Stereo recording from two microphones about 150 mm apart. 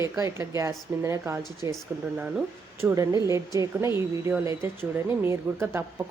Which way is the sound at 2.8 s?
20° right (ahead or behind).